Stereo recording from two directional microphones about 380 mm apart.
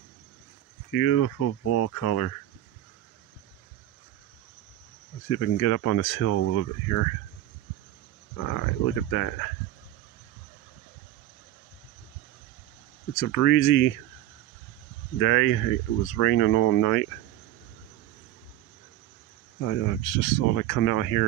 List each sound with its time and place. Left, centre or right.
1.1 s speech: left
1.9 s speech: left
5.3 s speech: left
6.2 s speech: left
6.6 s speech: left
8.4 s speech: left
13.1 s speech: left
15.1 s speech: left
19.6 s speech: left